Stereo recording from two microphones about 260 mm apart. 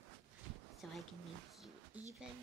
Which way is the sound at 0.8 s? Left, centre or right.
Centre.